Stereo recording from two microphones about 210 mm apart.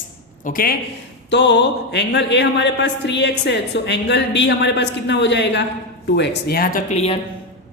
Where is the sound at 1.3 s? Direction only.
55° left (ahead or behind); by 7.2 s 30° left (ahead or behind).